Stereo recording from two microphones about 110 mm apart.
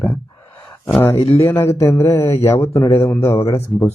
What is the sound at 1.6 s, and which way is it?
Speech, 25° left (ahead or behind).